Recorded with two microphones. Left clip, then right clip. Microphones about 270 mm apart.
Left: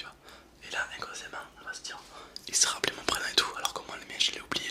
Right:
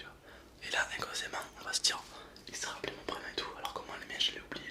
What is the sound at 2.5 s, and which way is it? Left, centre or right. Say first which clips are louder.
Whispering: left 12 dB; left.